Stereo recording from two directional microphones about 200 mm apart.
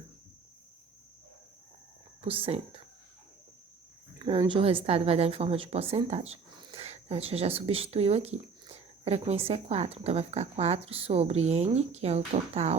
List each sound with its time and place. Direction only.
2.2 s speech: 30° right (ahead or behind)
4.2 s a woman's voice: 25° right (ahead or behind)